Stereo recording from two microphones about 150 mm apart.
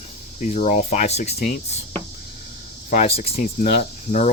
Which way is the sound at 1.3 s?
80° left.